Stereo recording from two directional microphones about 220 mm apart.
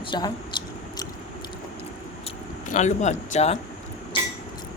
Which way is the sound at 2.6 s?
35° left (ahead or behind).